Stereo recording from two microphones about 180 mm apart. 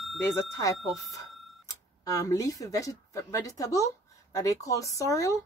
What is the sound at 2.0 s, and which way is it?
Speech, 20° left (ahead or behind).